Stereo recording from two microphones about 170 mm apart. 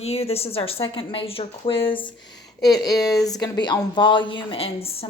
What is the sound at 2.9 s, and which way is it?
A woman's voice, 20° left (ahead or behind).